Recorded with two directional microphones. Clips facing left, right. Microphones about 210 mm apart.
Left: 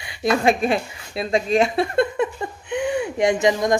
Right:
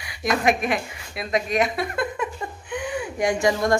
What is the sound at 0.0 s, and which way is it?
A woman's voice, 25° left (ahead or behind).